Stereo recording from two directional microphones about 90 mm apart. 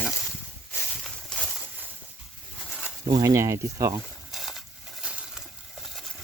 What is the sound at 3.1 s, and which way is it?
Speech, 35° right (ahead or behind).